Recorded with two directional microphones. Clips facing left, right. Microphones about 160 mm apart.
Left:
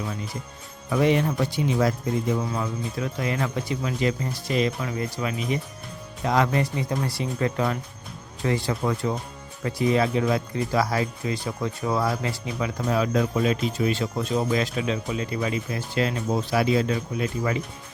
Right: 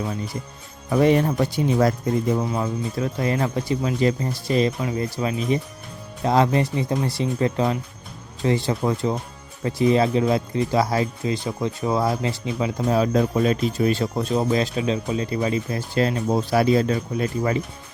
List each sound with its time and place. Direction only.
0.9 s speech: 40° right (ahead or behind)
2.4 s speech: 30° right (ahead or behind)